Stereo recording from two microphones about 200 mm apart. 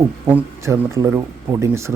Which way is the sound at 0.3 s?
10° right (ahead or behind).